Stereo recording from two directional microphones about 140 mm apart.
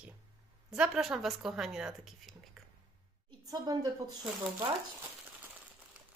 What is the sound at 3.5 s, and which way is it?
Speech, 30° right (ahead or behind).